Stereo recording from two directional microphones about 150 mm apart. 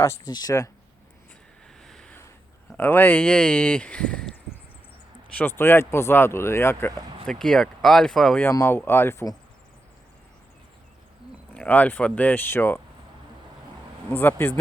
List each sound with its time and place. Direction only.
0.0 s speech: 25° left (ahead or behind)
1.8 s a sound: 5° left (ahead or behind)
2.7 s speech: 10° left (ahead or behind)
5.4 s speech: 15° left (ahead or behind)
7.3 s speech: 5° left (ahead or behind)
8.4 s speech: 20° left (ahead or behind)
11.5 s speech: 10° left (ahead or behind)
14.1 s speech: 15° left (ahead or behind)